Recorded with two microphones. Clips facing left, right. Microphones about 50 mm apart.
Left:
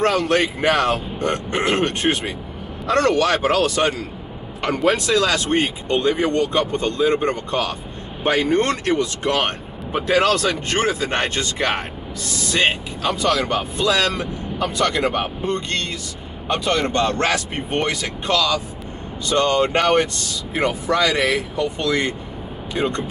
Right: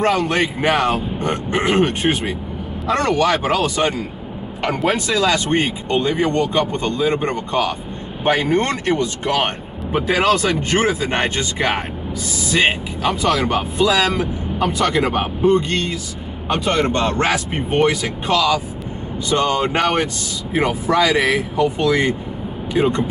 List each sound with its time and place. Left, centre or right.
0.6 s speech: centre
10.0 s speech: centre
17.5 s speech: centre